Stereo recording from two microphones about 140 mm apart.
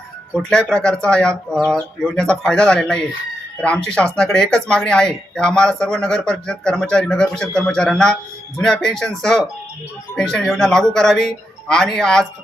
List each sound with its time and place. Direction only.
0.3 s speech: 5° left (ahead or behind)